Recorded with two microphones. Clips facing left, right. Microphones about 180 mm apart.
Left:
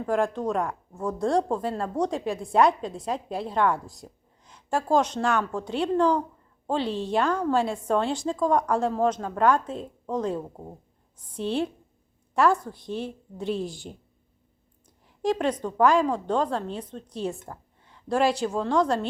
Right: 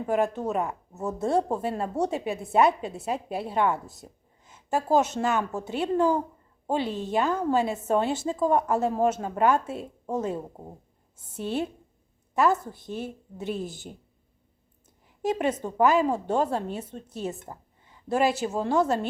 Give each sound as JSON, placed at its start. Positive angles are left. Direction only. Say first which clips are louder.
{"t": 0.1, "sound": "a woman's voice", "louder": "left 1 dB", "side_deg": -5}
{"t": 11.3, "sound": "a woman's voice", "louder": "left 2 dB", "side_deg": -5}
{"t": 15.2, "sound": "a woman's voice", "louder": "left 1 dB", "side_deg": -5}